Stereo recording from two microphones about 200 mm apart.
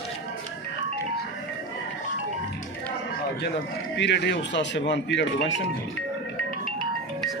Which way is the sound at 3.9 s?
60° left (ahead or behind).